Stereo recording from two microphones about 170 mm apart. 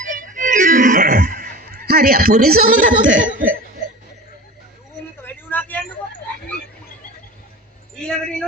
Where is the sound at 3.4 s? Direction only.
55° right (ahead or behind).